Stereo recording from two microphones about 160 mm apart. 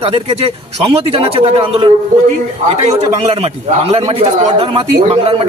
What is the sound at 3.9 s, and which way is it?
Speech, 35° right (ahead or behind).